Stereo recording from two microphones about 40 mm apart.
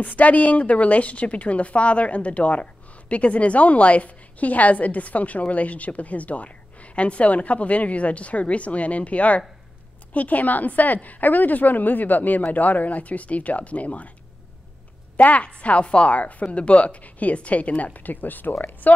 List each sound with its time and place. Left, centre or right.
0.0 s a woman's voice: left
15.1 s a woman's voice: left